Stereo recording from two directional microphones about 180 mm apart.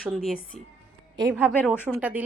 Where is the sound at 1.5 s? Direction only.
5° left (ahead or behind).